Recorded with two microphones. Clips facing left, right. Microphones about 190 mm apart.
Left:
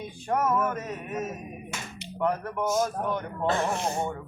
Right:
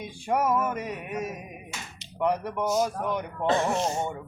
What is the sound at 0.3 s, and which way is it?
Speech, 10° right (ahead or behind).